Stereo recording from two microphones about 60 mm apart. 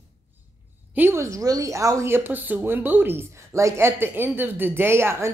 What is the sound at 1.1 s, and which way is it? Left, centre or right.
A woman's voice, right.